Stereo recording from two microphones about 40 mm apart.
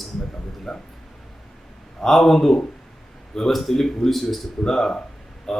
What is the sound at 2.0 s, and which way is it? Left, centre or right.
Speech, centre.